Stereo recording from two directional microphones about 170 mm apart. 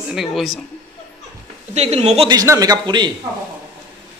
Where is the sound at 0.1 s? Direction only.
Centre (ahead or behind).